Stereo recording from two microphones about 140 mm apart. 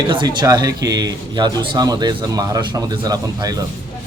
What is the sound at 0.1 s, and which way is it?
Speech, 35° right (ahead or behind).